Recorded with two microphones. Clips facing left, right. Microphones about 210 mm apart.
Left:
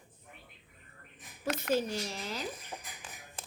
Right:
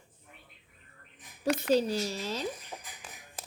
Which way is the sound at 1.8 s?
25° right (ahead or behind).